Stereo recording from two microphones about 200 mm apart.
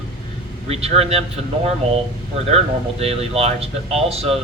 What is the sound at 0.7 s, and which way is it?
Speech, 30° right (ahead or behind).